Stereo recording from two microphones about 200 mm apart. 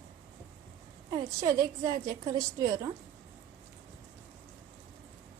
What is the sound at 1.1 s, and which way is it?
A woman's voice, 20° right (ahead or behind).